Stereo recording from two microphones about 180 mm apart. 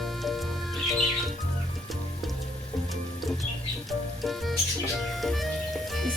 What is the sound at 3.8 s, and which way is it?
Music, centre (ahead or behind).